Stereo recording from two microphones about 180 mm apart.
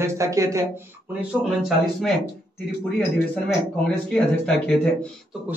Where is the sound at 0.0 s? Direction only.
15° right (ahead or behind).